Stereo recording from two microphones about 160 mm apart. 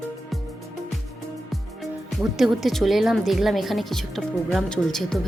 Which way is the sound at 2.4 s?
Centre (ahead or behind).